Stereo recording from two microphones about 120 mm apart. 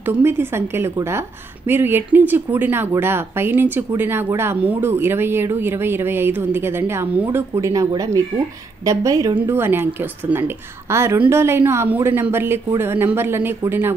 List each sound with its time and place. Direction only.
0.0 s speech: 20° right (ahead or behind)